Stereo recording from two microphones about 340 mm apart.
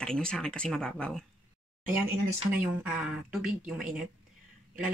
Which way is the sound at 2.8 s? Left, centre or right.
Centre.